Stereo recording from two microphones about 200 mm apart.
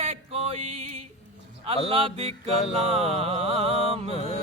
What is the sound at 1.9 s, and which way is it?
Mantra, 25° right (ahead or behind).